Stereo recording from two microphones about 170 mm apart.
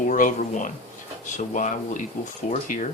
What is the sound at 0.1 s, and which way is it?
Speech, 50° left (ahead or behind).